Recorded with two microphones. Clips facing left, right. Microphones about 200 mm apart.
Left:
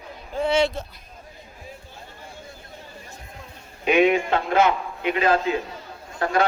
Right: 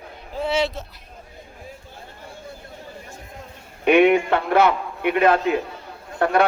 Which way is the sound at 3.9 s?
60° right (ahead or behind).